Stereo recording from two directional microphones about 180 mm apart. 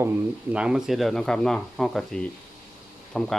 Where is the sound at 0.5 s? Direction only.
5° right (ahead or behind).